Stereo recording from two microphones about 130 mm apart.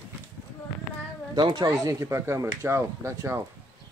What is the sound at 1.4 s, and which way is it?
Speech, 35° right (ahead or behind).